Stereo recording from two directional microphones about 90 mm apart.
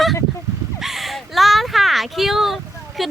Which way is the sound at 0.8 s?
Centre (ahead or behind).